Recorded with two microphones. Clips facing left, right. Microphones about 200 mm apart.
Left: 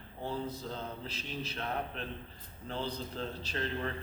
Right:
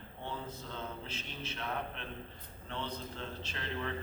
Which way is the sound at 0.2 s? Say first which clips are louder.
Left 6 dB; 35° left (ahead or behind).